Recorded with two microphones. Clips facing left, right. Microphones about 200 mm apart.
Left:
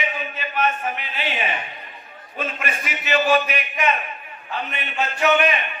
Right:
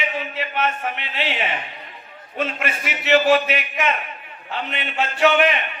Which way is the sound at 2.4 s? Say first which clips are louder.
Right 3 dB; 75° right (ahead or behind).